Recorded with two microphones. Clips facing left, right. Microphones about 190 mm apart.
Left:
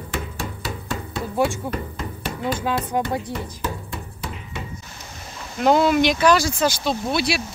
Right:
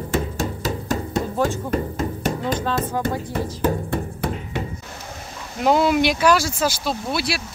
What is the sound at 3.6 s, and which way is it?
Music, 55° right (ahead or behind).